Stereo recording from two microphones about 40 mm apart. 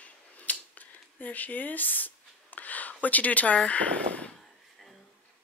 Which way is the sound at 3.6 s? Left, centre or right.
Left.